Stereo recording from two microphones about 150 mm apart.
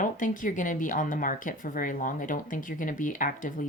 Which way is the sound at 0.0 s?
60° left (ahead or behind).